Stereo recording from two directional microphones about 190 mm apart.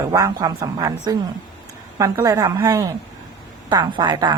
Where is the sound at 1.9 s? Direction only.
15° right (ahead or behind).